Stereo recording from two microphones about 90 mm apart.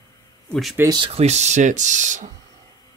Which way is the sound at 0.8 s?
55° right (ahead or behind).